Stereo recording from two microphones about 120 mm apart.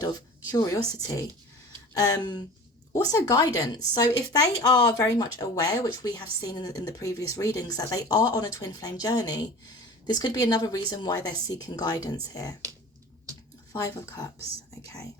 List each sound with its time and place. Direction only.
0.5 s a woman's voice: 25° left (ahead or behind)
1.9 s speech: 30° left (ahead or behind)
13.7 s a woman's voice: 25° left (ahead or behind)